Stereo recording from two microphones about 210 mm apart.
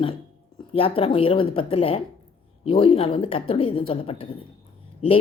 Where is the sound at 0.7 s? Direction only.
25° left (ahead or behind).